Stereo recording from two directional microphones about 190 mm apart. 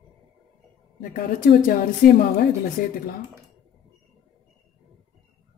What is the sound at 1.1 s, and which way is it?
A woman's voice, 50° left (ahead or behind).